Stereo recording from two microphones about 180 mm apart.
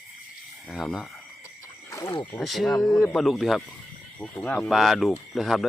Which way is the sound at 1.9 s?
20° left (ahead or behind).